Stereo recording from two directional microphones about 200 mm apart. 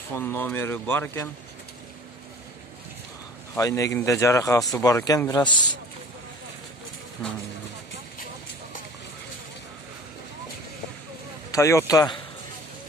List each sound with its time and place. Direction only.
0.1 s speech: 10° left (ahead or behind)
3.5 s speech: 15° left (ahead or behind)
11.5 s speech: 15° left (ahead or behind)